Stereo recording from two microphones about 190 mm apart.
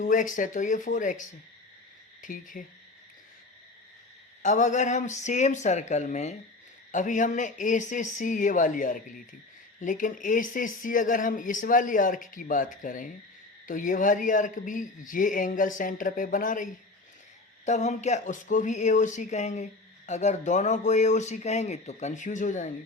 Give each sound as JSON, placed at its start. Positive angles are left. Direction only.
{"t": 0.0, "sound": "speech", "side_deg": 45}
{"t": 4.4, "sound": "speech", "side_deg": 40}
{"t": 17.7, "sound": "speech", "side_deg": 35}